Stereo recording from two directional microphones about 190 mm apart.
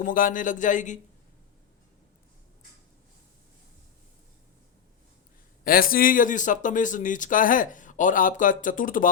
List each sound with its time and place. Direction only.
0.0 s a man's voice: 45° left (ahead or behind)
5.6 s a man's voice: 50° left (ahead or behind)